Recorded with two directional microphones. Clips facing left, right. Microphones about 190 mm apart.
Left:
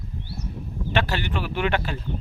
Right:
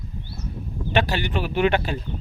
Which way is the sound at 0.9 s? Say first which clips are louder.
Right 3 dB; 15° right (ahead or behind).